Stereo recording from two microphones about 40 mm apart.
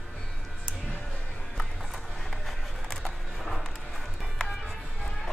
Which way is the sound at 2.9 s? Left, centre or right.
Centre.